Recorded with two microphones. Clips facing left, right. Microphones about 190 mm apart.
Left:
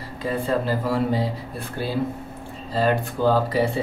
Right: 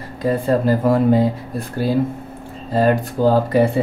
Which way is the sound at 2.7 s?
45° right (ahead or behind).